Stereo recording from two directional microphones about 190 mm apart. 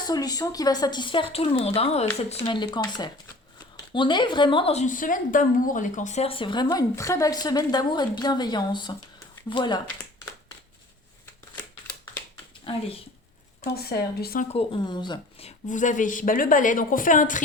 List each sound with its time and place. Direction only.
0.0 s a woman's voice: 20° left (ahead or behind)
13.7 s speech: 55° left (ahead or behind)
14.4 s speech: 30° left (ahead or behind)